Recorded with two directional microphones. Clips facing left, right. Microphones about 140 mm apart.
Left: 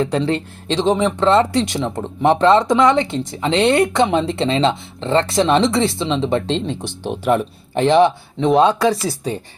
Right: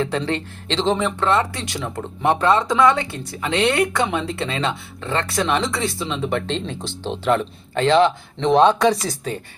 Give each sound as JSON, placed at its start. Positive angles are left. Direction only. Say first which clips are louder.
{"t": 0.7, "sound": "speech", "louder": "left 4 dB", "side_deg": 15}
{"t": 6.7, "sound": "speech", "louder": "left 3 dB", "side_deg": 15}